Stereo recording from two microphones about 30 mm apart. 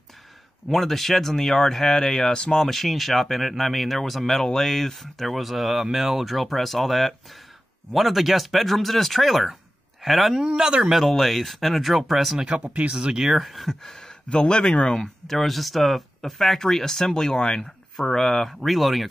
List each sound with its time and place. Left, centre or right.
0.7 s speech: centre
12.6 s speech: right
13.1 s speech: centre
13.7 s a sound: centre
14.4 s speech: left
15.2 s speech: centre
18.6 s speech: centre